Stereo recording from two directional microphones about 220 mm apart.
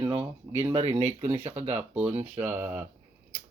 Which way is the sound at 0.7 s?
25° right (ahead or behind).